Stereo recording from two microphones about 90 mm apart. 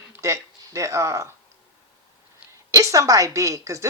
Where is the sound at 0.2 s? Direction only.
35° right (ahead or behind).